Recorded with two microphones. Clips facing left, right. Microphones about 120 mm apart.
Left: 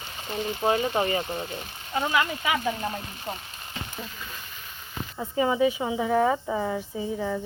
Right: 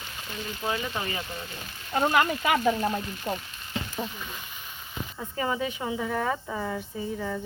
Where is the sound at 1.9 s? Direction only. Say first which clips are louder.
Right 2 dB; 45° right (ahead or behind).